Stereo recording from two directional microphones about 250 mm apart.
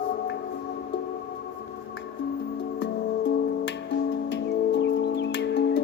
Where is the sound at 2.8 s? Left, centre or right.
Left.